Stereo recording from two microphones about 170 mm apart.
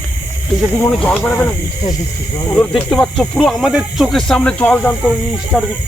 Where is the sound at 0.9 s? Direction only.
5° left (ahead or behind).